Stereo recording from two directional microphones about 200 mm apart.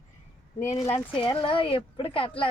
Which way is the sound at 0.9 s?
30° left (ahead or behind).